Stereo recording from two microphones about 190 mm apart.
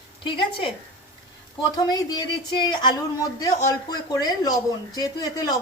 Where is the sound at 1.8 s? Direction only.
20° left (ahead or behind).